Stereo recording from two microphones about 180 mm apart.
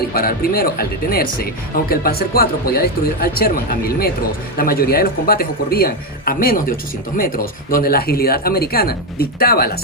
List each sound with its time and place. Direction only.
0.1 s speech: 55° left (ahead or behind)